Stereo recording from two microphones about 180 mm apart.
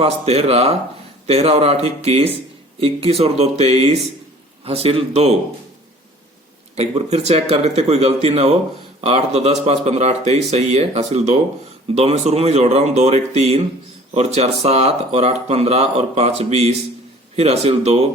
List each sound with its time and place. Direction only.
0.0 s speech: 35° right (ahead or behind)
6.7 s speech: 35° right (ahead or behind)